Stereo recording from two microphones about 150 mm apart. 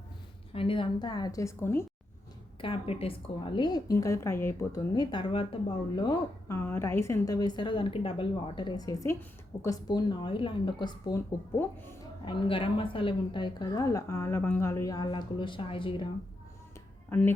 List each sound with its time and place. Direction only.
0.5 s a woman's voice: 35° left (ahead or behind); by 1.8 s 15° left (ahead or behind)
2.6 s a woman's voice: 40° left (ahead or behind); by 4.8 s 15° left (ahead or behind)
4.9 s a woman's voice: 30° left (ahead or behind)
6.5 s a woman's voice: 15° left (ahead or behind)
12.2 s a woman's voice: 35° left (ahead or behind)
17.1 s speech: 15° left (ahead or behind)